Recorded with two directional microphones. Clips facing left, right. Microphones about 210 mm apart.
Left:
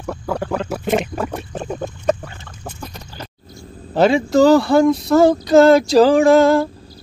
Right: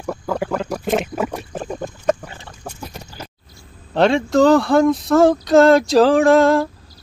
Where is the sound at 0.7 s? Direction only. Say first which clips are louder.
Left 1 dB; 5° left (ahead or behind).